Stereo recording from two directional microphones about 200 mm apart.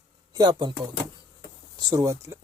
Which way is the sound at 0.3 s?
20° right (ahead or behind).